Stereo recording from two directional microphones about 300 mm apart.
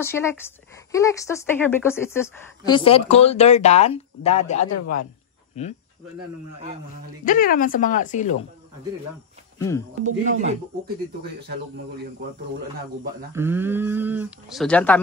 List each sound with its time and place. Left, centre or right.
0.0 s a woman's voice: centre
4.6 s a man's voice: left
5.5 s a woman's voice: left
7.2 s a woman's voice: left
9.6 s speech: centre
10.0 s speech: right
13.3 s speech: centre